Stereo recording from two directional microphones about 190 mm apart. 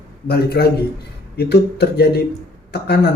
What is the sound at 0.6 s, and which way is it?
Speech, 60° left (ahead or behind).